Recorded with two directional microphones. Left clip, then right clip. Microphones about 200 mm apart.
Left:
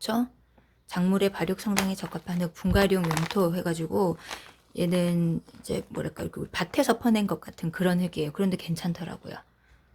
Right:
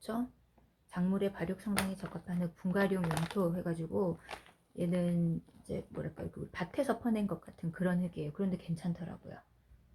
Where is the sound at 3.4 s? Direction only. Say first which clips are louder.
Left 9 dB; 45° left (ahead or behind).